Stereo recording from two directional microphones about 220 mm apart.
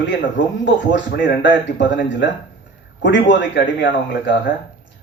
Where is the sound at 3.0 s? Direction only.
55° left (ahead or behind).